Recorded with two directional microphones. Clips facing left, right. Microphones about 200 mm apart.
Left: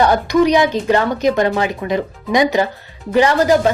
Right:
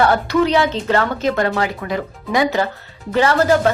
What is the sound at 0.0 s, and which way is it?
Speech, 15° left (ahead or behind).